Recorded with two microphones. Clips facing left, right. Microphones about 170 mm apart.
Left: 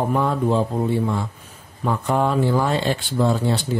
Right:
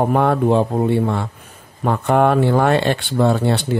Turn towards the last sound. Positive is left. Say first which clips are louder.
# right 4 dB
turn(degrees=-65)  # may be behind; listen again after turning